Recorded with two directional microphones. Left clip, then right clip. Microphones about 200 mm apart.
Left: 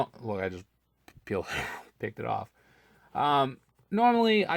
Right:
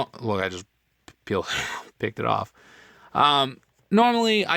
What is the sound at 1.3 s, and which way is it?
Speech, 25° right (ahead or behind).